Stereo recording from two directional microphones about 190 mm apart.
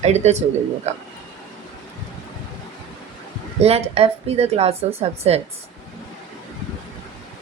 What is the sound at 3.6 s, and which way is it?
Speech, 30° right (ahead or behind).